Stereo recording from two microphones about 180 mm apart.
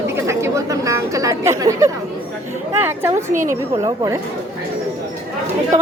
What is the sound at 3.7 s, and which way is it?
Speech, 30° right (ahead or behind).